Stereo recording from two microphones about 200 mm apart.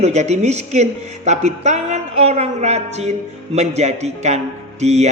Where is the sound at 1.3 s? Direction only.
35° right (ahead or behind).